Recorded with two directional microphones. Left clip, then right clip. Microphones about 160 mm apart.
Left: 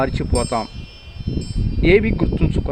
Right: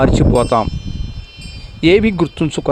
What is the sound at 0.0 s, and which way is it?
Speech, 35° right (ahead or behind).